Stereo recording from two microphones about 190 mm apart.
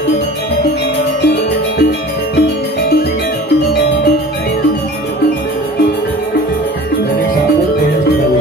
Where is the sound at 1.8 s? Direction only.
60° left (ahead or behind).